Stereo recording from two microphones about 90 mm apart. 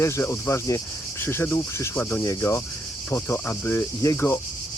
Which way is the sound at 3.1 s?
25° left (ahead or behind).